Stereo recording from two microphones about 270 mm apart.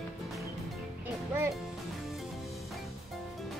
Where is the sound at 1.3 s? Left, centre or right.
Centre.